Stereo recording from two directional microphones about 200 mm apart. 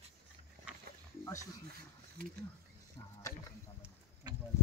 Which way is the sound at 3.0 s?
15° left (ahead or behind).